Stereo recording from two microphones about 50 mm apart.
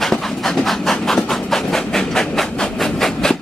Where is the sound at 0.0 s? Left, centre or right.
Centre.